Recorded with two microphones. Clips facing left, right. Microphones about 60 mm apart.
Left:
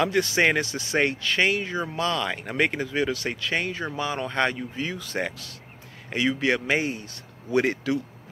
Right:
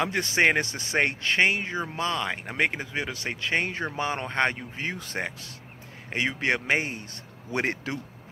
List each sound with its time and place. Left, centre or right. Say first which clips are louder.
0.0 s speech: left 2 dB; right